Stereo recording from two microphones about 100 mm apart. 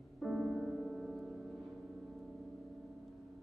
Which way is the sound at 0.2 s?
5° right (ahead or behind).